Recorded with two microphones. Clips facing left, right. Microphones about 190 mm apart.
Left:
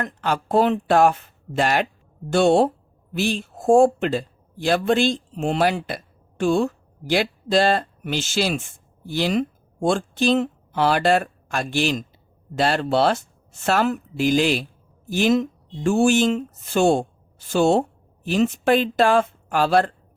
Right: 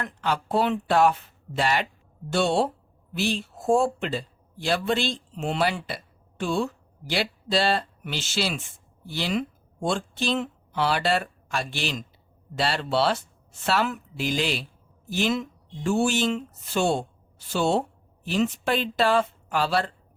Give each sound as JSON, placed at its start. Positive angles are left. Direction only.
{"t": 0.0, "sound": "speech", "side_deg": 50}